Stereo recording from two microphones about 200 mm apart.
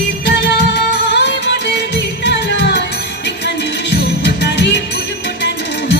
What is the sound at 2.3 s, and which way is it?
Music, 60° left (ahead or behind).